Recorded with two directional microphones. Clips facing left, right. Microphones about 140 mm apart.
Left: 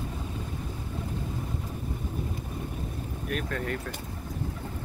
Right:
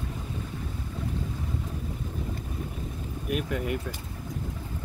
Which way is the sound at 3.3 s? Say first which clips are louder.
Right 3 dB; 10° right (ahead or behind).